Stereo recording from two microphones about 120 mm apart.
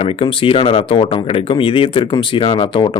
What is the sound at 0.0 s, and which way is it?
Speech, 50° left (ahead or behind).